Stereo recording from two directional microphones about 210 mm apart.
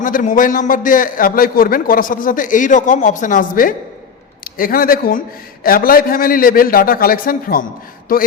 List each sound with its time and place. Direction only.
0.0 s a man's voice: 40° left (ahead or behind)